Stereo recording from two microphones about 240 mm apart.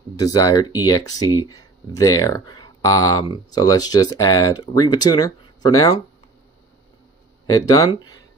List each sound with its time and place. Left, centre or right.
0.1 s speech: centre
7.4 s speech: centre